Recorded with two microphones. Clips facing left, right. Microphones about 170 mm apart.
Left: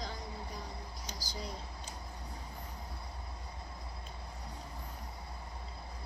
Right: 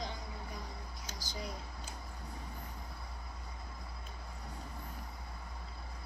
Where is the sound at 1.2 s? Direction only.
20° right (ahead or behind).